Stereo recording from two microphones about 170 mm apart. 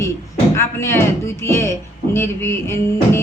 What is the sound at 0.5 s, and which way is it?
A man's voice, 15° left (ahead or behind).